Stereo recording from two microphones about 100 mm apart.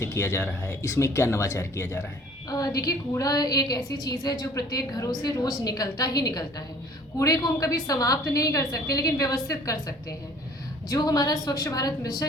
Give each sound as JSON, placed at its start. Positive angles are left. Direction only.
{"t": 0.0, "sound": "speech", "side_deg": 25}
{"t": 2.5, "sound": "a woman's voice", "side_deg": 40}